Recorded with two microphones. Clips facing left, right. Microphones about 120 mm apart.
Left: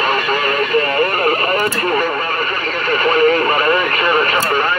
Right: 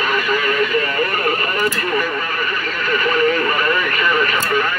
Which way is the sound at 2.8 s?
40° left (ahead or behind).